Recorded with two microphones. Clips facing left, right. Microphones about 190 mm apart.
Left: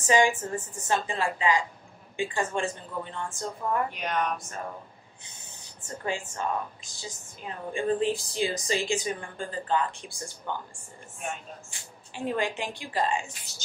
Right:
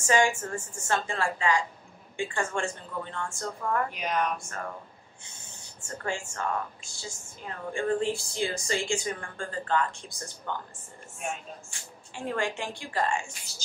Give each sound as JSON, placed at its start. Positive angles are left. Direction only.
{"t": 0.0, "sound": "a woman's voice", "side_deg": 15}
{"t": 3.9, "sound": "speech", "side_deg": 0}
{"t": 4.4, "sound": "a woman's voice", "side_deg": 20}
{"t": 5.9, "sound": "a woman's voice", "side_deg": 20}
{"t": 12.2, "sound": "a woman's voice", "side_deg": 20}